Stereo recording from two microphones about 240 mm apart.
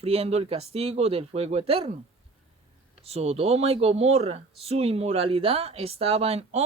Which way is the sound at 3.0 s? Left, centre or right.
Right.